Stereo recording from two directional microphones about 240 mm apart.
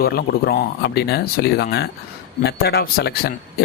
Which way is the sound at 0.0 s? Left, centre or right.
Left.